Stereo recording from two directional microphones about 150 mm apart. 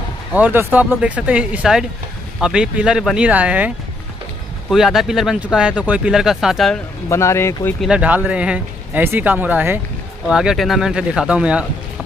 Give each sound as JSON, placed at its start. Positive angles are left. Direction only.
{"t": 0.3, "sound": "speech", "side_deg": -10}
{"t": 7.1, "sound": "speech", "side_deg": 20}
{"t": 7.8, "sound": "speech", "side_deg": -10}